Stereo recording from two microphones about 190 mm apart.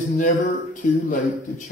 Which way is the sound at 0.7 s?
45° left (ahead or behind).